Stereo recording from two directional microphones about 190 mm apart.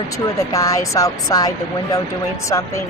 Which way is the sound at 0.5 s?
15° left (ahead or behind).